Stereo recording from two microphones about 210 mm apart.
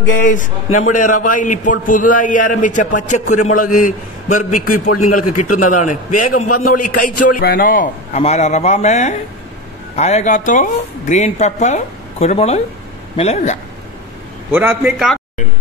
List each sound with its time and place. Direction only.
0.2 s a man's voice: 40° left (ahead or behind)
4.6 s a man's voice: 90° left
5.6 s a man's voice: 35° left (ahead or behind)
6.6 s a sound: 45° left (ahead or behind)
7.3 s a man's voice: 45° left (ahead or behind)
14.5 s a man's voice: 10° right (ahead or behind)